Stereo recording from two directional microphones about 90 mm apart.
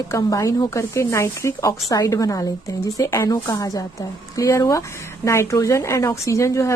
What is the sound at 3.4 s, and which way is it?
A woman's voice, 45° left (ahead or behind).